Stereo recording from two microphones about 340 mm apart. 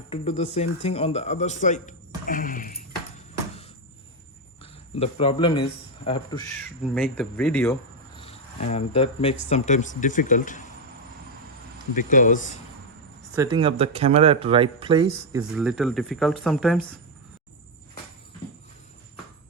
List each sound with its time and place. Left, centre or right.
0.1 s speech: centre
4.6 s speech: centre
6.9 s speech: centre; by 10.6 s left
11.9 s speech: left
13.3 s speech: centre
15.5 s speech: centre